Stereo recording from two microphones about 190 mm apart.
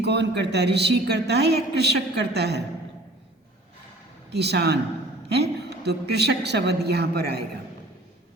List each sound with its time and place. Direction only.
0.0 s a woman's voice: 65° right (ahead or behind)
4.3 s a woman's voice: 60° right (ahead or behind)